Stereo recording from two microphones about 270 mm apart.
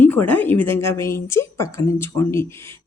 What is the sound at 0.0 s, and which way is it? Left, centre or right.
A woman's voice, centre.